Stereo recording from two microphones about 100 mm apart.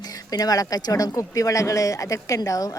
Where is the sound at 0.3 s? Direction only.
40° left (ahead or behind).